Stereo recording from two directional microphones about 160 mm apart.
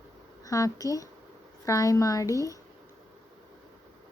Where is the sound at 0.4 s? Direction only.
20° left (ahead or behind).